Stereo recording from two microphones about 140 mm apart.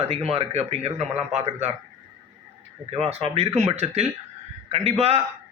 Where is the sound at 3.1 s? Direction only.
45° right (ahead or behind).